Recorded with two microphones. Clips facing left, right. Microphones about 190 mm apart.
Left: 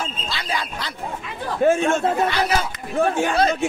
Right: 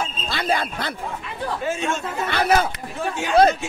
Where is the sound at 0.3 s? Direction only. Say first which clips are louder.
Right 7 dB; 55° right (ahead or behind).